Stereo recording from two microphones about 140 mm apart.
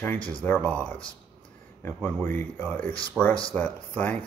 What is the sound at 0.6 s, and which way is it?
Speech, 10° left (ahead or behind).